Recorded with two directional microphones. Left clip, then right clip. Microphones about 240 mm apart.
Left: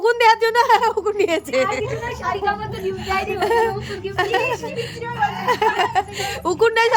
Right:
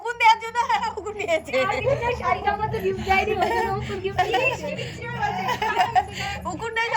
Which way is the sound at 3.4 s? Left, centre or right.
Centre.